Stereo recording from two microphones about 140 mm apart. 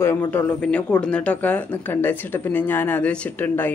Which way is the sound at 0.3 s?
10° left (ahead or behind).